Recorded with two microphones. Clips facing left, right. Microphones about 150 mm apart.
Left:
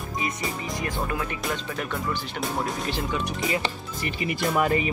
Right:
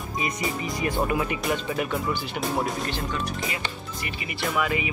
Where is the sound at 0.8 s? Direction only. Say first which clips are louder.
Right 5 dB; 10° right (ahead or behind).